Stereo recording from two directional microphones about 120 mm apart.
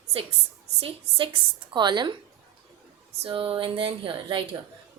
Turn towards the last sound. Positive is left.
turn(degrees=-45)  # may be behind; listen again after turning